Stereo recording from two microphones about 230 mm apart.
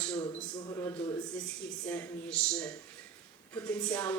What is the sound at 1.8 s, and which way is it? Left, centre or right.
A man's voice, centre.